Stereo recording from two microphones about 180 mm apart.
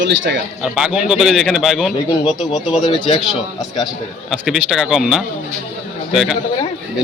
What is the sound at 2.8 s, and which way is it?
Speech, 25° left (ahead or behind).